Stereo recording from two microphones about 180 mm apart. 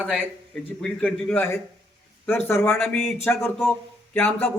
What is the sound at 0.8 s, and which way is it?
A man's voice, 5° left (ahead or behind).